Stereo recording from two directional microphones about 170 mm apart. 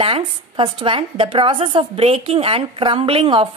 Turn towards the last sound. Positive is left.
turn(degrees=-30)  # may be behind; listen again after turning